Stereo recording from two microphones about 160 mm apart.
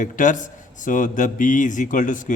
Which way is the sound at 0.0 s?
55° left (ahead or behind).